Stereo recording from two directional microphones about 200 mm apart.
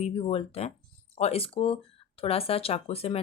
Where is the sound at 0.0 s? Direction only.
30° left (ahead or behind).